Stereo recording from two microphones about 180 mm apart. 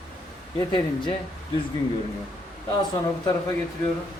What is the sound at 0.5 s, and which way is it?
Speech, 25° left (ahead or behind).